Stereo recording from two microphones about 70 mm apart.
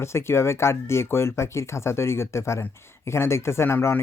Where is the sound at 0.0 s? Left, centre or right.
Left.